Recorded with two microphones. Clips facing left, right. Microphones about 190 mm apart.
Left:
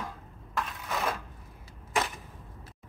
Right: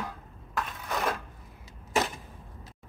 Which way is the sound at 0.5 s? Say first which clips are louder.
Right 1 dB; centre (ahead or behind).